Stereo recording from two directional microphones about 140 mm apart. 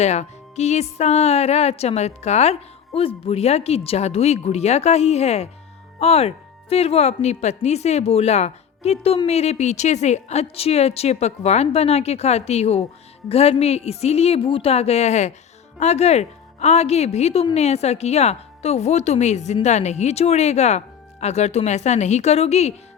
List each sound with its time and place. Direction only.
0.0 s speech: 50° left (ahead or behind)